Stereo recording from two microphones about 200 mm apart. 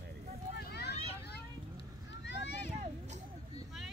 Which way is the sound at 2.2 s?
60° left (ahead or behind).